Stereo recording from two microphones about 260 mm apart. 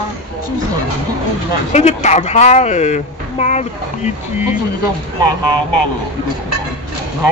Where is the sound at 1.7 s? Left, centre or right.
Left.